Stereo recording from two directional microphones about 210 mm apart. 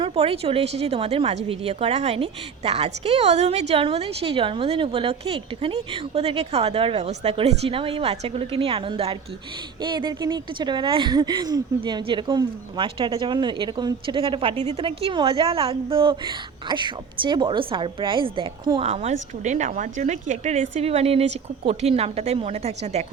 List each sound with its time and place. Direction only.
0.0 s a woman's voice: 30° right (ahead or behind)